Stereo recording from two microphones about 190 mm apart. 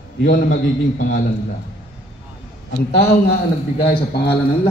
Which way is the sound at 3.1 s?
55° left (ahead or behind).